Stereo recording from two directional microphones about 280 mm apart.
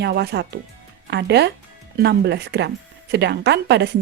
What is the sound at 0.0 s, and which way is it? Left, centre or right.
Speech, right.